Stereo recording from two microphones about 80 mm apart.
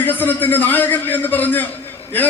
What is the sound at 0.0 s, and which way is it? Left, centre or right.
A man's voice, left.